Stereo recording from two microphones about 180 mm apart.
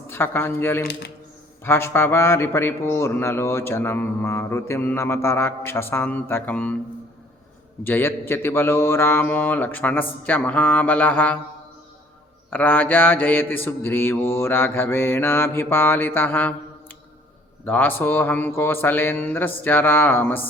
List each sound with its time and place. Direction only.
0.1 s a man's voice: 15° left (ahead or behind)
0.9 s speech: 65° left (ahead or behind)
1.6 s a man's voice: 15° left (ahead or behind)
7.9 s a man's voice: 10° left (ahead or behind)
12.5 s a man's voice: 10° left (ahead or behind)
17.7 s a man's voice: 10° left (ahead or behind)